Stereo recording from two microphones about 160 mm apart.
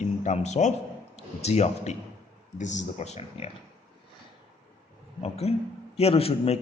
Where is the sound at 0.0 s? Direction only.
50° left (ahead or behind).